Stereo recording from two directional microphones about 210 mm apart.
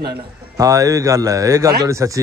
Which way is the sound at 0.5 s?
15° right (ahead or behind).